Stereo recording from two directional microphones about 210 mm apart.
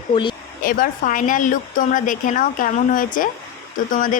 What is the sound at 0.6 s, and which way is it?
Speech, 40° left (ahead or behind).